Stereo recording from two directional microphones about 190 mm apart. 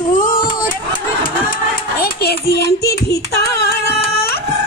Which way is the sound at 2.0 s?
55° left (ahead or behind).